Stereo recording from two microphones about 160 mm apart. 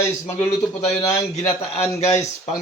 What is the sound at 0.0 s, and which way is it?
Speech, 20° left (ahead or behind).